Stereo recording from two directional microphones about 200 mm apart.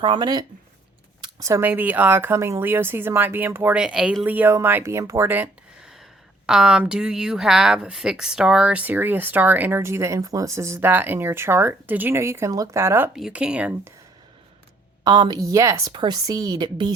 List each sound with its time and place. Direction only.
0.0 s speech: 20° right (ahead or behind)
15.0 s speech: 20° right (ahead or behind)